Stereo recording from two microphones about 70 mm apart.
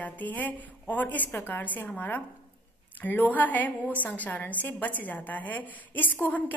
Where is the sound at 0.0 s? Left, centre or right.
Left.